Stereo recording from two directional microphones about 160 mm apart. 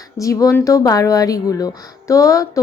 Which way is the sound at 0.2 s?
20° left (ahead or behind).